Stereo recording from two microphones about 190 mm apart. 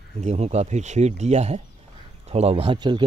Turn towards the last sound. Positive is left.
turn(degrees=-25)  # may be behind; listen again after turning